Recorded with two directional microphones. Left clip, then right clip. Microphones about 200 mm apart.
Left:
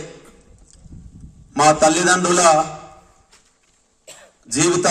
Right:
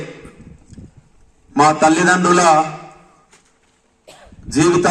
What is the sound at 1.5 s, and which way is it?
A man's voice, 30° left (ahead or behind).